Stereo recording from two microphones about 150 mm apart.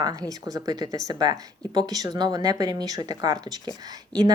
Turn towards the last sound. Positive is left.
turn(degrees=-25)  # may be behind; listen again after turning